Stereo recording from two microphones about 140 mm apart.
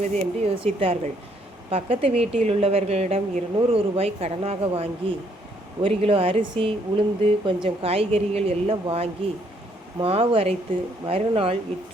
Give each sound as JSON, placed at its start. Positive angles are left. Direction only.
{"t": 0.0, "sound": "a woman's voice", "side_deg": -45}